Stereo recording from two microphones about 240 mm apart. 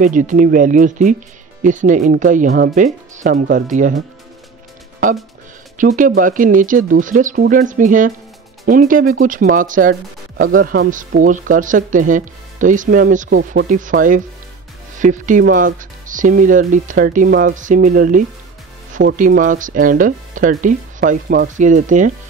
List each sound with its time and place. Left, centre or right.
0.0 s speech: right
5.8 s speech: right